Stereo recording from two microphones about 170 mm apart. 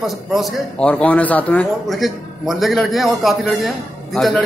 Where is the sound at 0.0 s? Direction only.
Centre (ahead or behind).